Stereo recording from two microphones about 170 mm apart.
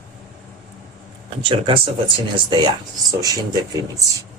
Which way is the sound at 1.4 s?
30° right (ahead or behind).